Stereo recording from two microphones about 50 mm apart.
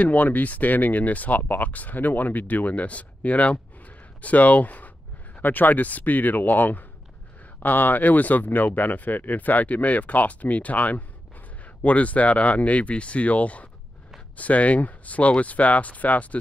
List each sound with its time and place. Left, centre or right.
0.0 s speech: left